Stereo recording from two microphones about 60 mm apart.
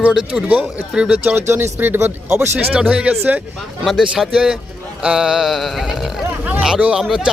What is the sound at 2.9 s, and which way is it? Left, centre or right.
Speech, centre.